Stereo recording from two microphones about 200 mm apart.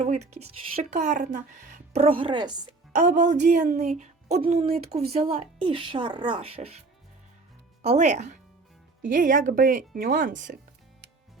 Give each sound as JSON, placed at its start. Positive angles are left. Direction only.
{"t": 0.0, "sound": "speech", "side_deg": -35}
{"t": 2.9, "sound": "a woman's voice", "side_deg": -40}
{"t": 7.8, "sound": "speech", "side_deg": -35}